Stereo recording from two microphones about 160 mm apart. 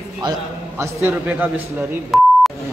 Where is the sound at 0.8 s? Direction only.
15° right (ahead or behind).